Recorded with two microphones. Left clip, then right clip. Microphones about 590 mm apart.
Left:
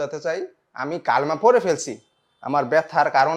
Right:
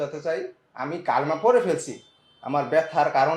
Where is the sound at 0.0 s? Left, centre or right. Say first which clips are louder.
Left 2 dB; left.